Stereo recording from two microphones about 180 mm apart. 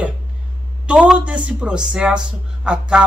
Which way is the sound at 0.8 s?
5° right (ahead or behind).